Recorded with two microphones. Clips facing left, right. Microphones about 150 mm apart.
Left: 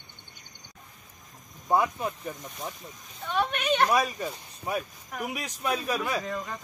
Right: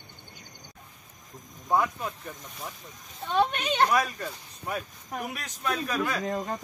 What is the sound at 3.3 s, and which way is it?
Speech, 35° right (ahead or behind).